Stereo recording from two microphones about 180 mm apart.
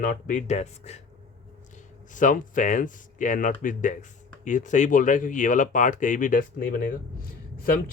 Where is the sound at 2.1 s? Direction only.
45° left (ahead or behind).